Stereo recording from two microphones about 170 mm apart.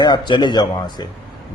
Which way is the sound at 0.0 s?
25° left (ahead or behind).